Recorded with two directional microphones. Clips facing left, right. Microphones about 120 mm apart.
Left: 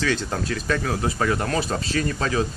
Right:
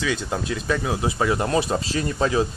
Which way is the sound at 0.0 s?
10° right (ahead or behind).